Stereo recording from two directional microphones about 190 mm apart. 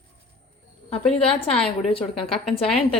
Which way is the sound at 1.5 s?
30° left (ahead or behind).